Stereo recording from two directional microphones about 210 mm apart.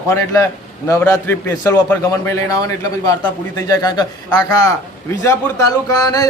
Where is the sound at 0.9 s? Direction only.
15° left (ahead or behind).